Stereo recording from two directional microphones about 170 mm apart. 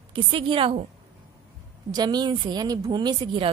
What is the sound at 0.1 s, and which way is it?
Speech, 30° right (ahead or behind).